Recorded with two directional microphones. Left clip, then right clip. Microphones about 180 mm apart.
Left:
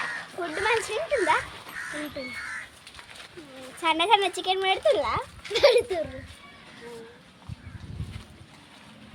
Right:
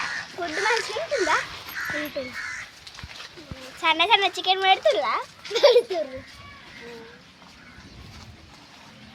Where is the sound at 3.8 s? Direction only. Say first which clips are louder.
Right 2 dB; 85° left.